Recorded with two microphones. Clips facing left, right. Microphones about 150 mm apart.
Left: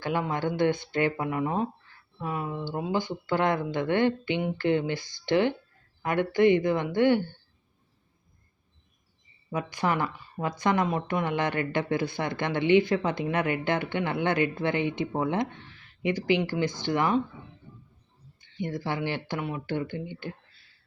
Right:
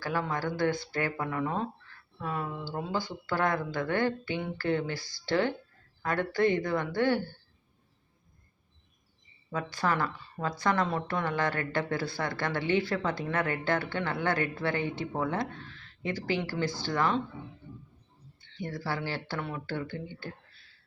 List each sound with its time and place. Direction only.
0.0 s a woman's voice: 20° left (ahead or behind)
9.5 s a woman's voice: 15° left (ahead or behind)
18.3 s speech: 15° left (ahead or behind)